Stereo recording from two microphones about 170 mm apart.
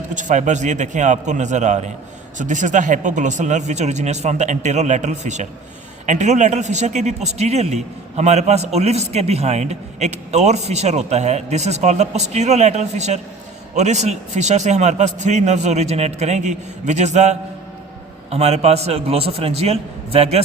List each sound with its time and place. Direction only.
0.1 s a man's voice: 45° right (ahead or behind)